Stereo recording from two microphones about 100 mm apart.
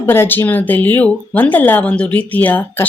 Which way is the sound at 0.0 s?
20° left (ahead or behind).